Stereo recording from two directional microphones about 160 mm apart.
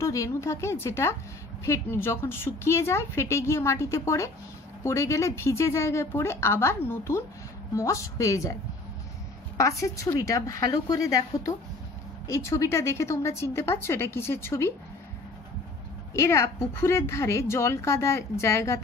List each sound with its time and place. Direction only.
0.0 s a woman's voice: 20° left (ahead or behind)
9.6 s a woman's voice: 20° left (ahead or behind)
16.2 s a woman's voice: 15° left (ahead or behind)